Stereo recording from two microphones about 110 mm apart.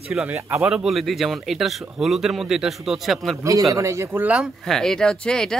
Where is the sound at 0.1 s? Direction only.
15° right (ahead or behind).